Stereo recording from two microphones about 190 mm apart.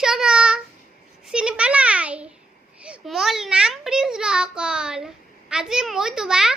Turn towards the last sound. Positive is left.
turn(degrees=-5)  # may be behind; listen again after turning